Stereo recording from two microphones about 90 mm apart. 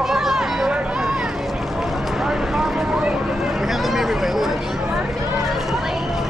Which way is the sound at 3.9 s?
Centre (ahead or behind).